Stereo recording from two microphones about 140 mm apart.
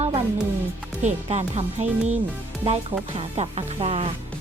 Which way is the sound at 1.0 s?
55° right (ahead or behind).